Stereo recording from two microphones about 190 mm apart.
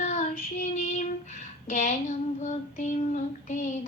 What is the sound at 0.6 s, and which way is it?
Child singing, 40° left (ahead or behind).